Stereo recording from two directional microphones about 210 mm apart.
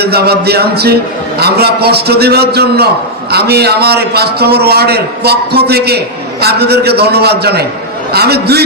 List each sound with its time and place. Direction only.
0.0 s a man's voice: 50° right (ahead or behind)